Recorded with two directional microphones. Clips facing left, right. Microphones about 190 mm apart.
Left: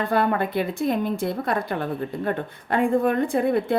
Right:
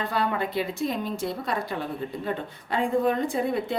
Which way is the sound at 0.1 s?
55° left (ahead or behind).